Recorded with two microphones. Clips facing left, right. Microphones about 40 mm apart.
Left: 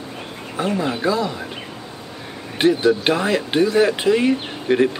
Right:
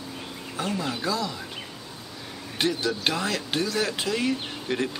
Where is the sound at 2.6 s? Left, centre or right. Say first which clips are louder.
Left 10 dB; left.